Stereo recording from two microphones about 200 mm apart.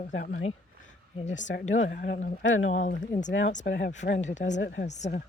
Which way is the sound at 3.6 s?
60° left (ahead or behind).